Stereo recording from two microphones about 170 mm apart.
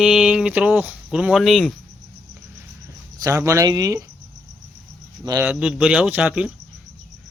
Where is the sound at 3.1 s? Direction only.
20° right (ahead or behind).